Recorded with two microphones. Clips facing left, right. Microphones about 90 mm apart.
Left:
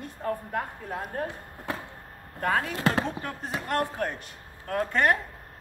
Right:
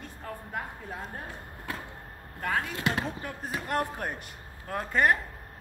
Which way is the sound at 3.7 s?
10° right (ahead or behind).